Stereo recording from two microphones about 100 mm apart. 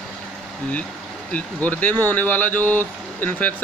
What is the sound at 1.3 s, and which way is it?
Speech, 15° left (ahead or behind).